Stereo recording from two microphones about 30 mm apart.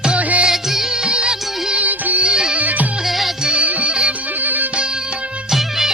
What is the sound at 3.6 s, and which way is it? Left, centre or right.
Music, right.